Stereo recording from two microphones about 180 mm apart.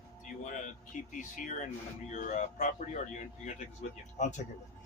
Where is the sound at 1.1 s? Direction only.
45° left (ahead or behind).